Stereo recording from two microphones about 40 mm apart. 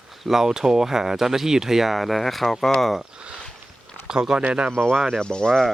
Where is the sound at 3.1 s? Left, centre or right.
Right.